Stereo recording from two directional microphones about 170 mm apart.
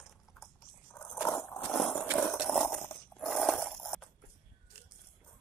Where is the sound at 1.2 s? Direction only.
20° left (ahead or behind).